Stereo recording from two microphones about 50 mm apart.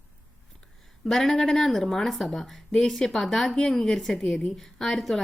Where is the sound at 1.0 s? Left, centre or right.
Centre.